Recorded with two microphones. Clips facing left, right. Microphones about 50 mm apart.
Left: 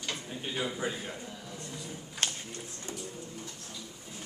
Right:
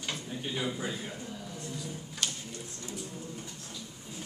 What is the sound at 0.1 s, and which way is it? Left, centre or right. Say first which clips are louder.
Speech: right 1 dB; centre.